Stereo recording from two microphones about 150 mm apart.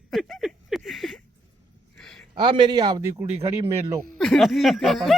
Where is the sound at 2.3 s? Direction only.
30° right (ahead or behind).